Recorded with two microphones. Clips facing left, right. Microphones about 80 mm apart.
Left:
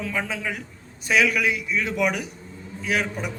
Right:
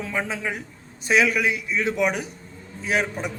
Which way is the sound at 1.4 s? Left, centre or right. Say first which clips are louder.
Even; centre.